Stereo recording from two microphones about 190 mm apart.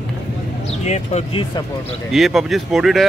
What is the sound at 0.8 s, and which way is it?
Speech, 35° left (ahead or behind).